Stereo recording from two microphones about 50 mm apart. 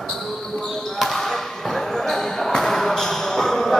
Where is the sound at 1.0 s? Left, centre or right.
Centre.